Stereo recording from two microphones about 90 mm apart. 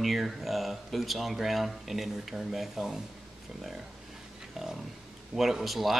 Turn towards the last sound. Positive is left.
turn(degrees=0)  # may be behind; listen again after turning